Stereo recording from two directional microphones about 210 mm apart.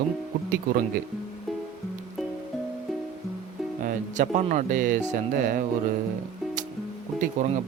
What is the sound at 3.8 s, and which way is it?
Speech, 35° right (ahead or behind).